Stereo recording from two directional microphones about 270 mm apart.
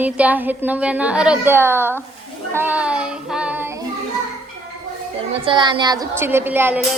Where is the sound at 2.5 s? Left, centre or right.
Centre.